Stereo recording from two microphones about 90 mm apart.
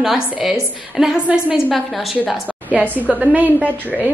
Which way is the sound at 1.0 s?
10° right (ahead or behind).